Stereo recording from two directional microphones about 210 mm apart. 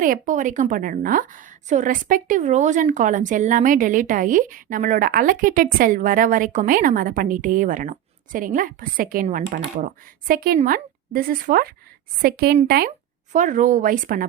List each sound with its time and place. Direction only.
0.0 s a woman's voice: 40° right (ahead or behind)